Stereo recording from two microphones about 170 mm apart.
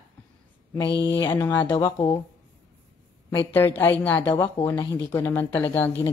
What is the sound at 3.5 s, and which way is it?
Speech, 10° left (ahead or behind).